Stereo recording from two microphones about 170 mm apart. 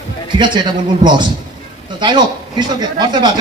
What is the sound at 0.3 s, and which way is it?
A man's voice, 25° right (ahead or behind).